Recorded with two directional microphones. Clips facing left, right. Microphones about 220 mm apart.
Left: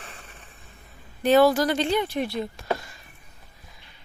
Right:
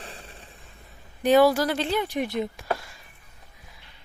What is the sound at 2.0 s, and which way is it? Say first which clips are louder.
Speech: right 1 dB; 15° right (ahead or behind).